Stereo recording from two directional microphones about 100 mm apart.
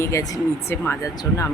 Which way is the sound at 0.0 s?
30° left (ahead or behind).